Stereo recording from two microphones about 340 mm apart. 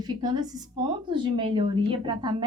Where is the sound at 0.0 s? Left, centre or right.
Centre.